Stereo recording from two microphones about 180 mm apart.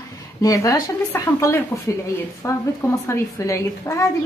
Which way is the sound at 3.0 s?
15° left (ahead or behind).